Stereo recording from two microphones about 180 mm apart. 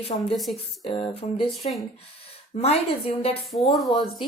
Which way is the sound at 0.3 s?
Centre (ahead or behind).